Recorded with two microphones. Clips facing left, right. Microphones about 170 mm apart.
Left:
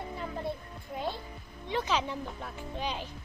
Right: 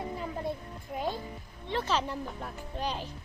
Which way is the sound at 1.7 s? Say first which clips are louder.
Even; centre (ahead or behind).